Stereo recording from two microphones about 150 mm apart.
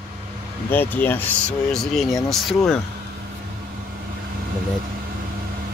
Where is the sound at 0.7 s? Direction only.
10° left (ahead or behind).